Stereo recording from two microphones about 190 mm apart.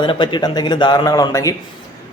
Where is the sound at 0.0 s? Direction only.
25° left (ahead or behind).